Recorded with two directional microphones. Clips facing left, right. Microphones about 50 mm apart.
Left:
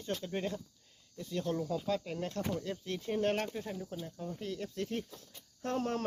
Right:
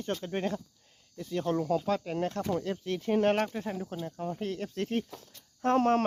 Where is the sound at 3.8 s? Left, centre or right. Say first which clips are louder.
Right 6 dB; right.